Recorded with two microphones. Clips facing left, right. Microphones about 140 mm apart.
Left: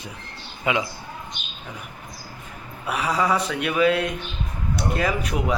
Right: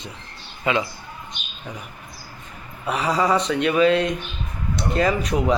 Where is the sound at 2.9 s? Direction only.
Centre (ahead or behind).